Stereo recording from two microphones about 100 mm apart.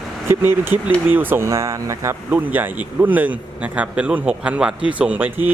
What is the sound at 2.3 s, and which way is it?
A man's voice, 15° right (ahead or behind).